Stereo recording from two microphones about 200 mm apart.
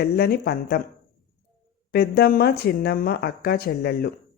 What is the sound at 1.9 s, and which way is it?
A woman's voice, 50° left (ahead or behind).